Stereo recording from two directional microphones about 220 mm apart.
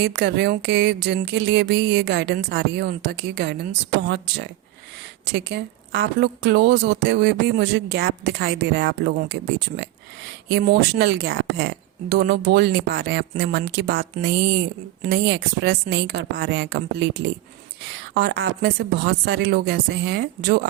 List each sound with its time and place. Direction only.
0.0 s a woman's voice: 50° right (ahead or behind)
18.1 s a woman's voice: 50° right (ahead or behind)